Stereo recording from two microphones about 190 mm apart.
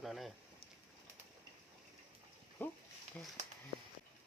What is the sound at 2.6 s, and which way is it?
Speech, 10° left (ahead or behind).